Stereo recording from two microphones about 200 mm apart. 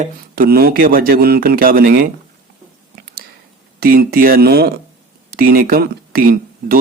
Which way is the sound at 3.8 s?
50° right (ahead or behind).